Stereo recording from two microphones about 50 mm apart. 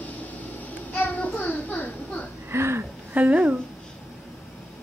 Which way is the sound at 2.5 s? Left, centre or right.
Right.